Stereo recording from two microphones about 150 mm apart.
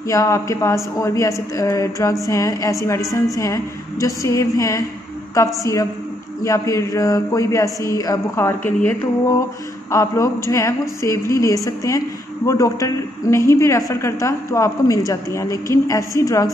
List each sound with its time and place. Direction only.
0.1 s a woman's voice: 20° left (ahead or behind)